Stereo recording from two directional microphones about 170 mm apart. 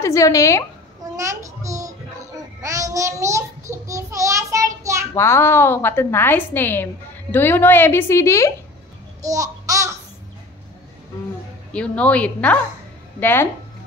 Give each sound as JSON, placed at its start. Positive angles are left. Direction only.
{"t": 0.0, "sound": "a woman's voice", "side_deg": 20}
{"t": 1.1, "sound": "child singing", "side_deg": -20}
{"t": 5.1, "sound": "a woman's voice", "side_deg": 15}
{"t": 9.2, "sound": "babbling", "side_deg": -20}
{"t": 11.7, "sound": "a woman's voice", "side_deg": 5}